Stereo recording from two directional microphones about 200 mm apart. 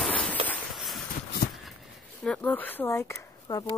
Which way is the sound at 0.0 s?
5° left (ahead or behind).